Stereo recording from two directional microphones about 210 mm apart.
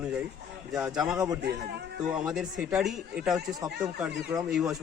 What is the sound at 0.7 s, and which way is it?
A man's voice, 5° right (ahead or behind).